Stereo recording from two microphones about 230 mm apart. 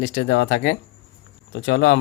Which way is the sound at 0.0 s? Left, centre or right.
Left.